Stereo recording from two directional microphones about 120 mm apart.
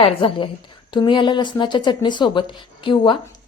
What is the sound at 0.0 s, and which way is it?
Speech, 55° left (ahead or behind).